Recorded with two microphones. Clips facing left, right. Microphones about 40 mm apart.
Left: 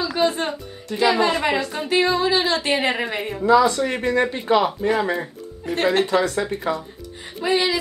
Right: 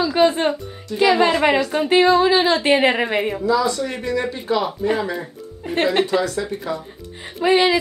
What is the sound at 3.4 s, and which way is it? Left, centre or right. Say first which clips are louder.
Speech: left 7 dB; left.